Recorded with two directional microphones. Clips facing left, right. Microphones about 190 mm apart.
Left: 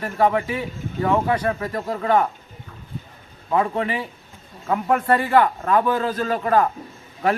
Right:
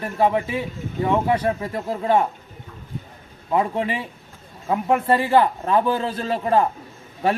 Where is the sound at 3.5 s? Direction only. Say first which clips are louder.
Even; 25° right (ahead or behind).